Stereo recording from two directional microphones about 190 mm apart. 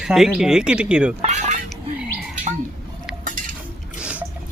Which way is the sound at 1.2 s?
35° right (ahead or behind).